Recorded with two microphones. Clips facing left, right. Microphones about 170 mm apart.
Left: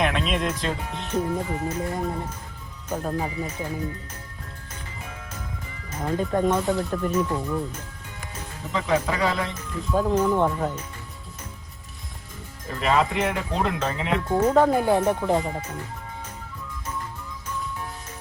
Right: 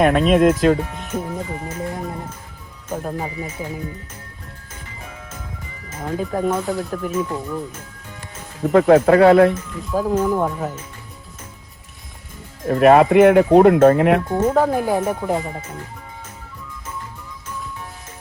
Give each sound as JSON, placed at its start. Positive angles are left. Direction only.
{"t": 0.0, "sound": "speech", "side_deg": -50}
{"t": 0.9, "sound": "speech", "side_deg": -5}
{"t": 5.9, "sound": "speech", "side_deg": -5}
{"t": 8.6, "sound": "speech", "side_deg": -55}
{"t": 9.6, "sound": "speech", "side_deg": -5}
{"t": 12.6, "sound": "speech", "side_deg": -60}
{"t": 14.3, "sound": "speech", "side_deg": -10}